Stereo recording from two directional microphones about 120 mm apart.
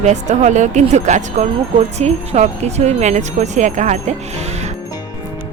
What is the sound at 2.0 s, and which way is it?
Speech, 70° right (ahead or behind).